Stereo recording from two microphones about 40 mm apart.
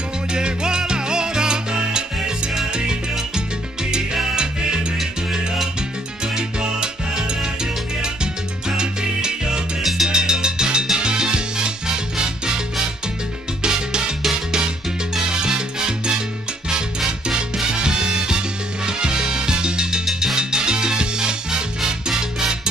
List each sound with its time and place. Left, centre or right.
0.3 s salsa music: right
4.9 s salsa music: centre
8.6 s salsa music: centre
10.0 s music: centre
10.9 s salsa music: centre
13.6 s music: right
15.4 s salsa music: centre
17.8 s music: centre
18.9 s salsa music: right